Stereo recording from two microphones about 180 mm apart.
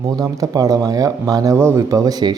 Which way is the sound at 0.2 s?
20° right (ahead or behind).